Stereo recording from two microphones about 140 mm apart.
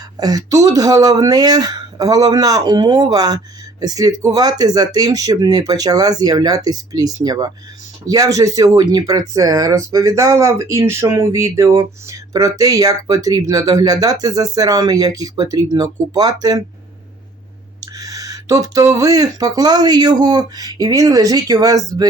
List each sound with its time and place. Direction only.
0.2 s speech: 25° right (ahead or behind)
17.9 s speech: 25° right (ahead or behind)